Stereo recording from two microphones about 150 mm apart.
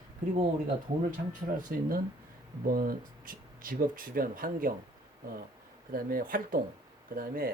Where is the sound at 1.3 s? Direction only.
65° right (ahead or behind).